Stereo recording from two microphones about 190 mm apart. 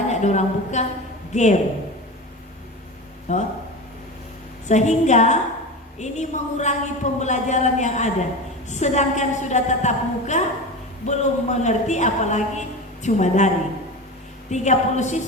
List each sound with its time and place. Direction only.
0.1 s a woman's voice: 35° left (ahead or behind)
3.3 s a woman's voice: 40° left (ahead or behind)
4.7 s a woman's voice: 40° left (ahead or behind)
14.5 s a woman's voice: 40° left (ahead or behind)